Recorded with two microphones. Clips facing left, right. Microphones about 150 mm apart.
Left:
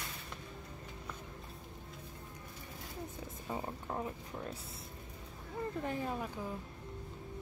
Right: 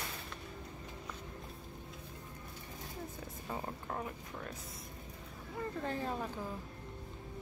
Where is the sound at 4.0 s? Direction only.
25° left (ahead or behind).